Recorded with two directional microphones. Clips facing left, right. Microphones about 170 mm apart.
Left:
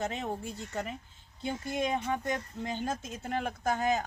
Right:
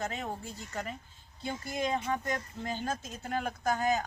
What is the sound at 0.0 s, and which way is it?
Speech, 25° left (ahead or behind).